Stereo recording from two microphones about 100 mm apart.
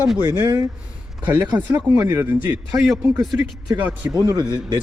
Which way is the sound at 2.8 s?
Centre (ahead or behind).